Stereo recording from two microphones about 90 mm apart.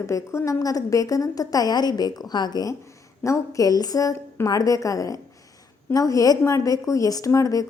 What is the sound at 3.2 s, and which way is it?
Speech, 35° left (ahead or behind).